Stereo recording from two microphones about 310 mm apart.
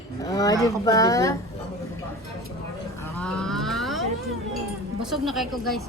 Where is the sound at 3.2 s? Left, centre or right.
Centre.